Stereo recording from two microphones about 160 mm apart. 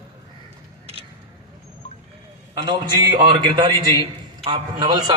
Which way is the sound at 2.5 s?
30° right (ahead or behind).